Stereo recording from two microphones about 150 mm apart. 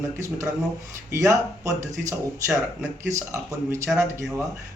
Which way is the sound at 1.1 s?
20° right (ahead or behind).